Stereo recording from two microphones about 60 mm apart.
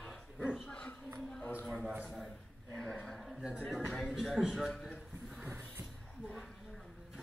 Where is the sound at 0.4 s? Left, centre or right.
Centre.